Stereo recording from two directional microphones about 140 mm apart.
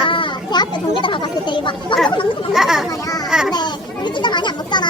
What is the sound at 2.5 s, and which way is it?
Speech, 5° right (ahead or behind).